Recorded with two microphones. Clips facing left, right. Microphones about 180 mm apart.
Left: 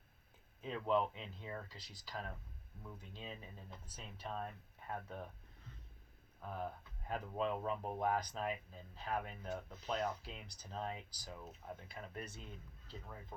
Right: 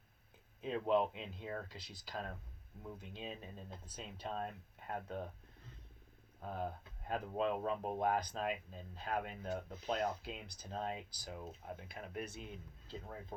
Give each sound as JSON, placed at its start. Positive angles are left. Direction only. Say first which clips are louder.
{"t": 0.6, "sound": "speech", "louder": "right 2 dB", "side_deg": -20}
{"t": 6.4, "sound": "speech", "louder": "right 2 dB", "side_deg": -25}